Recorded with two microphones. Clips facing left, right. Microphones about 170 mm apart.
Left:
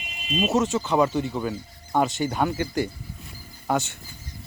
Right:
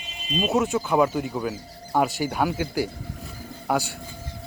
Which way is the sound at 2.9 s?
85° right.